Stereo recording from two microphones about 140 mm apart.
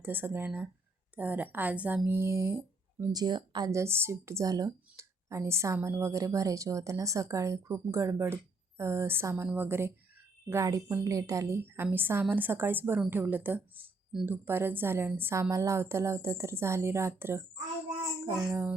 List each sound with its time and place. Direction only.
0.0 s a woman's voice: 15° right (ahead or behind)